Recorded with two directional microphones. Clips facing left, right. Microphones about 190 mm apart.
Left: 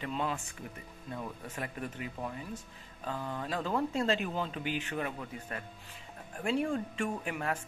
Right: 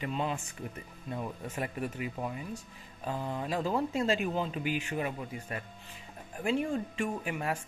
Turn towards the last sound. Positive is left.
turn(degrees=-10)  # may be behind; listen again after turning